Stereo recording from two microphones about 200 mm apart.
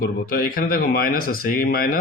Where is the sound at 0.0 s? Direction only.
45° left (ahead or behind).